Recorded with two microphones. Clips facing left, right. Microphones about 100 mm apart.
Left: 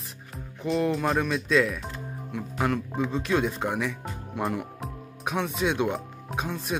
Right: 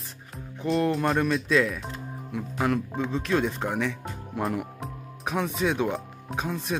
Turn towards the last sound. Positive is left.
turn(degrees=0)  # may be behind; listen again after turning